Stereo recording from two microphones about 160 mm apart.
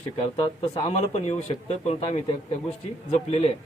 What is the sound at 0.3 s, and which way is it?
Speech, 35° left (ahead or behind).